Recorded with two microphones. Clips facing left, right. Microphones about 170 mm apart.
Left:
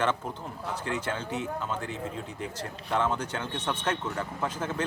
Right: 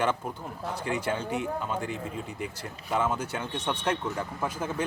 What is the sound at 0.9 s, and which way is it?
Speech, 10° right (ahead or behind).